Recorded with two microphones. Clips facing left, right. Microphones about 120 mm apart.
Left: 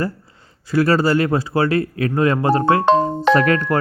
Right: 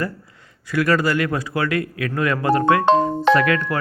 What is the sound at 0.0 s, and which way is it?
Speech, 30° left (ahead or behind).